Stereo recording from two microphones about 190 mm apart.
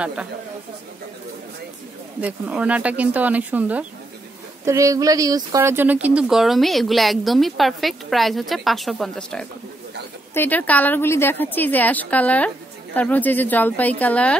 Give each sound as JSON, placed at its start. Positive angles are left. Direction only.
{"t": 0.0, "sound": "speech", "side_deg": -5}
{"t": 2.1, "sound": "a woman's voice", "side_deg": -5}